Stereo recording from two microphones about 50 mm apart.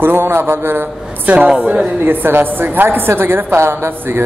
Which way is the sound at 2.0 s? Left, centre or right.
Right.